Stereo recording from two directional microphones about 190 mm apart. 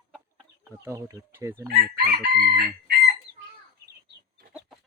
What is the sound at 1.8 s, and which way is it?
Chicken, 55° right (ahead or behind).